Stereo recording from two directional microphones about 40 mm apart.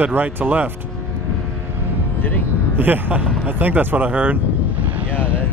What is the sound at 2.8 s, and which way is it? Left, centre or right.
Speech, right.